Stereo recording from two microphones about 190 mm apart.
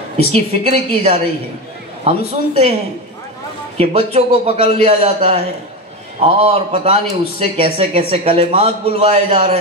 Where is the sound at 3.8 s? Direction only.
30° right (ahead or behind).